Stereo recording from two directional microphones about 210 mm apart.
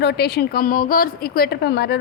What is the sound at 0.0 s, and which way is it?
A woman's voice, 50° left (ahead or behind).